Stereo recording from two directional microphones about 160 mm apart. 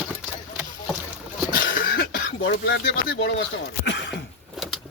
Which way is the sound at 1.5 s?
60° left (ahead or behind).